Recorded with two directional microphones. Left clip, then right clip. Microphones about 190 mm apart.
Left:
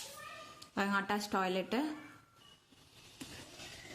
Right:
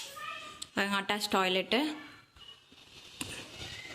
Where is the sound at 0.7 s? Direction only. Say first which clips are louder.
Right 3 dB; 5° left (ahead or behind).